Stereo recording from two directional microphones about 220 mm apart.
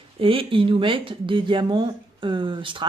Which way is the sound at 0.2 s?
25° right (ahead or behind).